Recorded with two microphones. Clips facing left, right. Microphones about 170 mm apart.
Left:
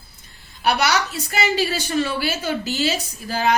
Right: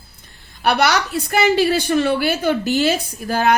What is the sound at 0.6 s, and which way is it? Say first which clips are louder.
A woman's voice: right 3 dB; 55° right (ahead or behind).